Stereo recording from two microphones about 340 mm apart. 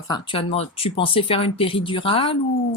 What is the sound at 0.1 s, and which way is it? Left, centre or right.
Speech, centre.